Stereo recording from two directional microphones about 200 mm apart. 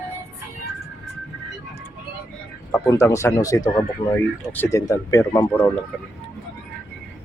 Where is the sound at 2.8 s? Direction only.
15° left (ahead or behind).